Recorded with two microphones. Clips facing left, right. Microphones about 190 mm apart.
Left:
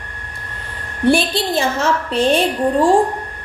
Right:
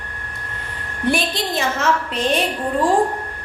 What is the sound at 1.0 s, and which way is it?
Speech, 30° left (ahead or behind).